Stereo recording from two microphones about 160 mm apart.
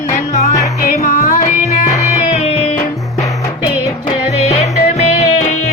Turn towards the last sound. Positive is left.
turn(degrees=40)  # may be behind; listen again after turning